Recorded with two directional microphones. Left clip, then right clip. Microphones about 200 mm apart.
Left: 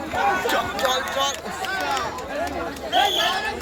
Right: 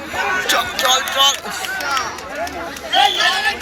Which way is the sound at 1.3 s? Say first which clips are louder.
Right 4 dB; 25° left (ahead or behind).